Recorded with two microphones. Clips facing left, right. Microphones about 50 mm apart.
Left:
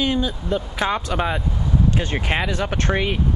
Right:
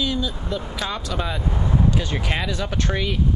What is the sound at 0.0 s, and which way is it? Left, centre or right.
Speech, left.